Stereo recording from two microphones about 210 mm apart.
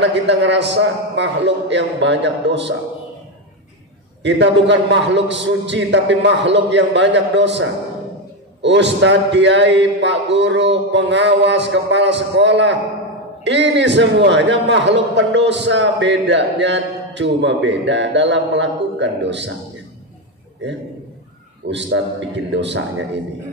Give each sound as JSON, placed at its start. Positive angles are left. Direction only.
{"t": 0.0, "sound": "a man's voice", "side_deg": -55}
{"t": 4.2, "sound": "a man's voice", "side_deg": -55}
{"t": 21.6, "sound": "a man's voice", "side_deg": -55}